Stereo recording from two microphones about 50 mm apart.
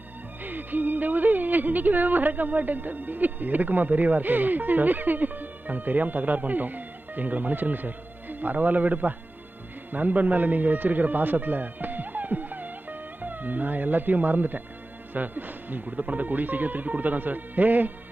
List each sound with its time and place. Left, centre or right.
0.4 s music: right
9.9 s speech: right
15.1 s music: right